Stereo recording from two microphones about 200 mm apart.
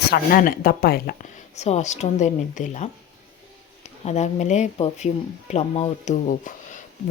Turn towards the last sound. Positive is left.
turn(degrees=40)  # may be behind; listen again after turning